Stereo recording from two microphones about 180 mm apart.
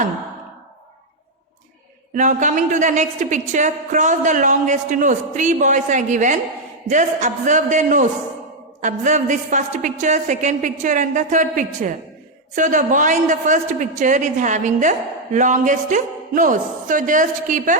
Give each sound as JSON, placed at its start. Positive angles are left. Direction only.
{"t": 2.1, "sound": "a man's voice", "side_deg": -45}